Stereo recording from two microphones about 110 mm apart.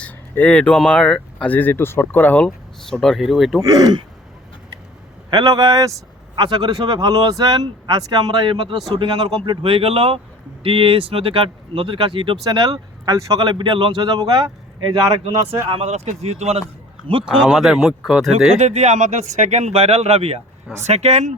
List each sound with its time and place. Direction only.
0.0 s speech: 15° left (ahead or behind)
3.0 s speech: centre (ahead or behind)
3.6 s speech: 35° right (ahead or behind)
5.3 s speech: 35° right (ahead or behind)
6.3 s speech: 45° right (ahead or behind)
13.1 s speech: 30° right (ahead or behind)
13.5 s speech: 45° right (ahead or behind)
15.2 s a man's voice: 60° right (ahead or behind)
17.2 s speech: 5° right (ahead or behind)
18.5 s speech: 90° right; by 20.4 s 70° right (ahead or behind)
20.8 s speech: 90° right